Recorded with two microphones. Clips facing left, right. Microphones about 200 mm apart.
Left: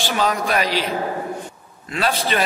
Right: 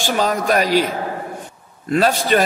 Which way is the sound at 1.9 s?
45° right (ahead or behind).